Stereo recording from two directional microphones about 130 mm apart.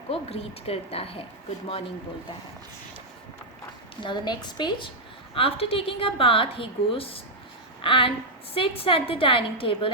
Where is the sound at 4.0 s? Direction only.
35° left (ahead or behind).